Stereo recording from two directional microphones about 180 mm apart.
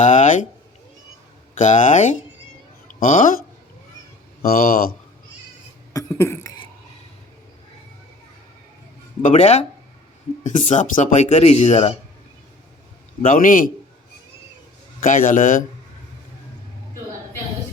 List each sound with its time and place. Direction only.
0.0 s a sound: 45° left (ahead or behind)
1.5 s speech: 45° left (ahead or behind)
4.4 s speech: 55° left (ahead or behind)
5.9 s cough: 15° left (ahead or behind)
9.2 s speech: 40° left (ahead or behind)
13.2 s speech: 50° left (ahead or behind)
15.0 s speech: 45° left (ahead or behind)